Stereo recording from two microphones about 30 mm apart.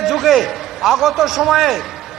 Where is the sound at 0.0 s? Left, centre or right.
Centre.